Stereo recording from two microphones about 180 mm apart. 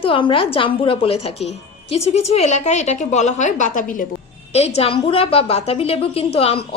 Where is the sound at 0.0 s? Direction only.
30° left (ahead or behind); by 4.0 s 45° left (ahead or behind).